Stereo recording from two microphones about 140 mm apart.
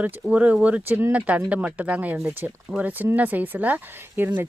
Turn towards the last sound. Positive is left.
turn(degrees=-15)  # may be behind; listen again after turning